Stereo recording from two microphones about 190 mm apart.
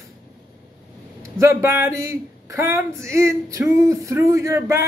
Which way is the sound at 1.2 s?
15° right (ahead or behind).